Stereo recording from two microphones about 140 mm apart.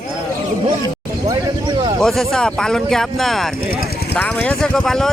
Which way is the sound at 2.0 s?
5° left (ahead or behind).